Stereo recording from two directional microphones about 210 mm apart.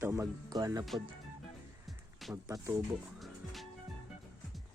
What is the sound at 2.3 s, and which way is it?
Speech, 15° right (ahead or behind).